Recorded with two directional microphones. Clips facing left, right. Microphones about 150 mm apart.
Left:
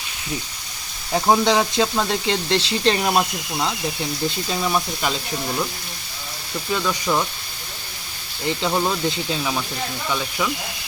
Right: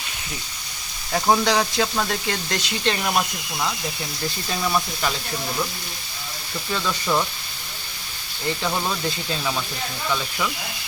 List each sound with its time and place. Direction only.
1.1 s speech: 20° left (ahead or behind)
6.7 s speech: 10° left (ahead or behind)
8.4 s speech: 20° left (ahead or behind)